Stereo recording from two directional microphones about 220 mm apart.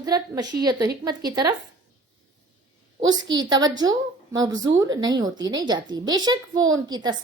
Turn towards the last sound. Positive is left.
turn(degrees=-20)  # may be behind; listen again after turning